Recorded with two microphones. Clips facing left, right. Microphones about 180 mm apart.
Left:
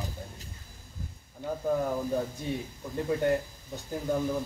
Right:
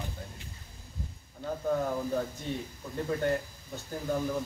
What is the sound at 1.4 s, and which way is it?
Speech, 15° left (ahead or behind).